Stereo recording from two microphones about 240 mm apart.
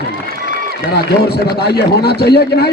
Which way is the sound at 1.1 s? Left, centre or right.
Left.